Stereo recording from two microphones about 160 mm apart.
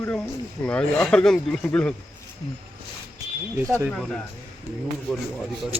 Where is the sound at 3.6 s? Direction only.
20° right (ahead or behind).